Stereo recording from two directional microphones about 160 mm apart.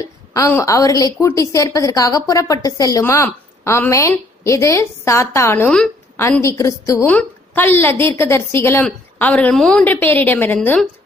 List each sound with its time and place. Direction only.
0.3 s a woman's voice: 15° left (ahead or behind)